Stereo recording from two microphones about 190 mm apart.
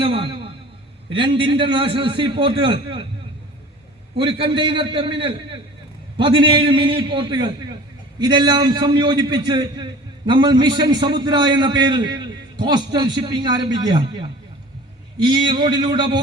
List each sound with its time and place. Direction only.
0.0 s a sound: 30° right (ahead or behind)
1.1 s a man's voice: 25° right (ahead or behind)
4.2 s a man's voice: 25° right (ahead or behind)